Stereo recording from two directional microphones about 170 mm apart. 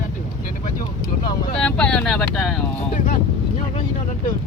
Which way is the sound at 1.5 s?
5° left (ahead or behind).